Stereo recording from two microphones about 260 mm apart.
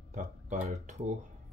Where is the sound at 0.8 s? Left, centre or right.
Right.